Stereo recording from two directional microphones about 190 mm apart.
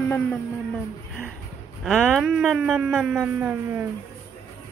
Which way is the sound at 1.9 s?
Centre (ahead or behind).